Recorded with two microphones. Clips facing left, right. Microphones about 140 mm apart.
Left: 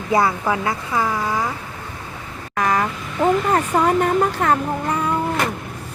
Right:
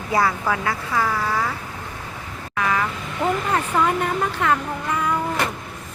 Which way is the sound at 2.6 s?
40° left (ahead or behind).